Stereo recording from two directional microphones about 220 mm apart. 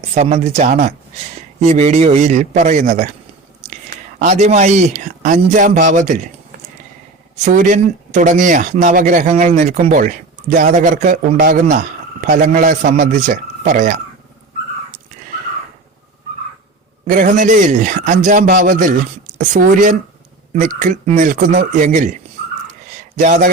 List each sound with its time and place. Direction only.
0.1 s speech: 30° right (ahead or behind)
7.4 s speech: 35° right (ahead or behind)
17.1 s speech: 35° right (ahead or behind)
23.1 s speech: 35° right (ahead or behind)